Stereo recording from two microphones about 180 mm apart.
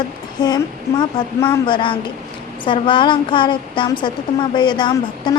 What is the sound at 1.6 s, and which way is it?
A woman's voice, 25° left (ahead or behind).